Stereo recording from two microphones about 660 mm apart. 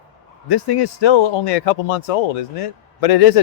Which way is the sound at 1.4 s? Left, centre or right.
Left.